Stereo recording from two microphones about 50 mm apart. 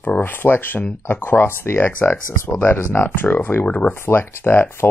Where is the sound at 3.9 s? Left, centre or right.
Left.